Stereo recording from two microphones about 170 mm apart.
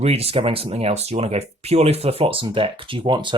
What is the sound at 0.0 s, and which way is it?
Speech, 35° right (ahead or behind).